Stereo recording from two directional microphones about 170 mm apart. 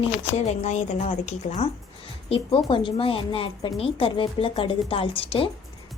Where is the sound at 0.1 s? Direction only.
40° left (ahead or behind).